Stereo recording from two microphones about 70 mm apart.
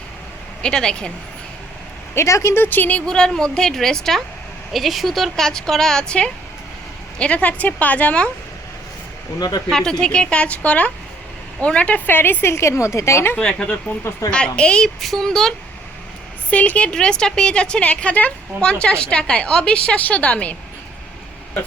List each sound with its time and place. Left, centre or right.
0.6 s a woman's voice: centre
2.1 s a woman's voice: left
3.1 s a woman's voice: centre
9.6 s a woman's voice: centre; by 13.3 s left
13.3 s a woman's voice: centre
16.5 s a woman's voice: left